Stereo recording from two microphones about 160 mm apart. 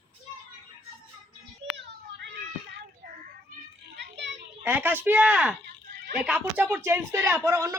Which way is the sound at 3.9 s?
90° right.